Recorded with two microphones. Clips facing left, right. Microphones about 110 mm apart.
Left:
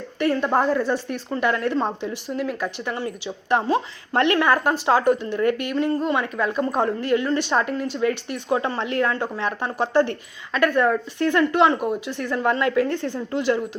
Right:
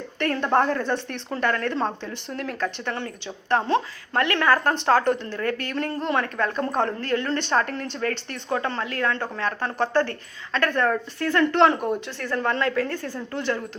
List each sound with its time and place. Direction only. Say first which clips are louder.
0.2 s a woman's voice: left 1 dB; 5° left (ahead or behind)
5.7 s a woman's voice: left 3 dB; 5° left (ahead or behind)
11.6 s a woman's voice: even; 5° left (ahead or behind)